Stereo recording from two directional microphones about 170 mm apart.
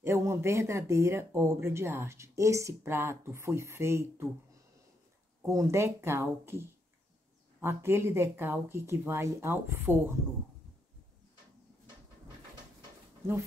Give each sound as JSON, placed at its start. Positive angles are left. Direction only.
{"t": 0.0, "sound": "speech", "side_deg": -15}
{"t": 5.4, "sound": "speech", "side_deg": -15}